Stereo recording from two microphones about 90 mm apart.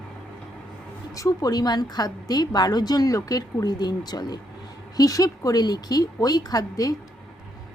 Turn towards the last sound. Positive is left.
turn(degrees=45)  # may be behind; listen again after turning